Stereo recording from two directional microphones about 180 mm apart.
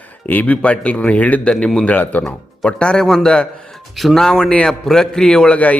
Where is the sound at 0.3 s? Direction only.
10° left (ahead or behind).